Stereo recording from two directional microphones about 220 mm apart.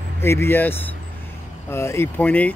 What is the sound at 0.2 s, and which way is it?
Speech, 10° left (ahead or behind).